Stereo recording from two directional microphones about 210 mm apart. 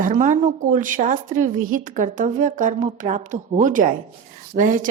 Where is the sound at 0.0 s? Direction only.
40° right (ahead or behind).